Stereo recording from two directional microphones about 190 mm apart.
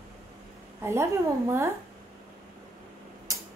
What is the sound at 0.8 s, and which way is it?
Speech, 15° right (ahead or behind).